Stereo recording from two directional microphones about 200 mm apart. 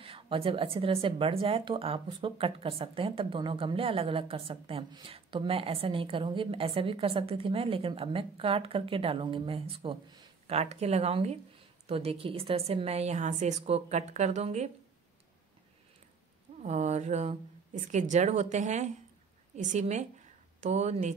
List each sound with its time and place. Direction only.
0.0 s a woman's voice: 25° right (ahead or behind)
16.6 s a woman's voice: 35° right (ahead or behind)